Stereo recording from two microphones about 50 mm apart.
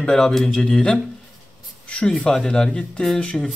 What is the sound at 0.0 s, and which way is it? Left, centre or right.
Speech, centre.